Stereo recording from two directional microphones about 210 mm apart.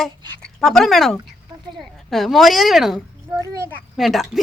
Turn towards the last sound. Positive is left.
turn(degrees=0)  # may be behind; listen again after turning